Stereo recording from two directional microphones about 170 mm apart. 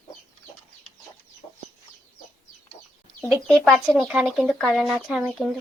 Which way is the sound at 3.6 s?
Centre (ahead or behind).